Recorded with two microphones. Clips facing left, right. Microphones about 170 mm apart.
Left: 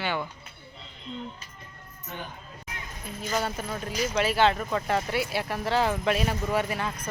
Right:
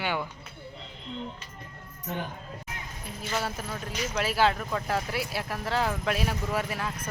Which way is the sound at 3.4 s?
Centre (ahead or behind).